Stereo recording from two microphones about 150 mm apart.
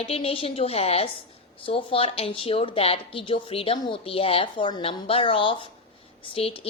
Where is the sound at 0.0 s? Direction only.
40° left (ahead or behind).